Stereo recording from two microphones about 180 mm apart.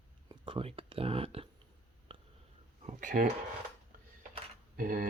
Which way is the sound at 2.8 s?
40° right (ahead or behind).